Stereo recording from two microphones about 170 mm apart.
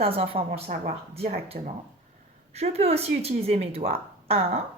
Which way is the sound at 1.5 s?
40° right (ahead or behind).